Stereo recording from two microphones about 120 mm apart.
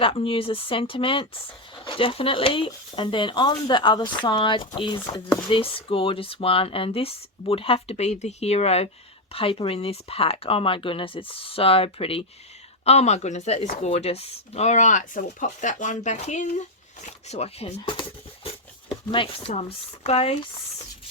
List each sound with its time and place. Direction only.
0.0 s speech: 50° left (ahead or behind)
9.3 s speech: 50° left (ahead or behind)
12.8 s speech: 65° left (ahead or behind)
19.1 s speech: 50° left (ahead or behind)